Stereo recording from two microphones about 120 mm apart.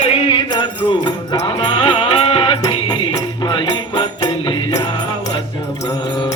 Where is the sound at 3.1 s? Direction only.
40° left (ahead or behind).